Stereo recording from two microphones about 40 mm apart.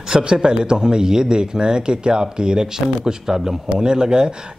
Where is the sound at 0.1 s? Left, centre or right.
Right.